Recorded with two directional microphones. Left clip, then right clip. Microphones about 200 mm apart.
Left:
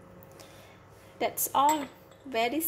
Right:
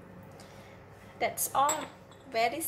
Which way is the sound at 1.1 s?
40° left (ahead or behind).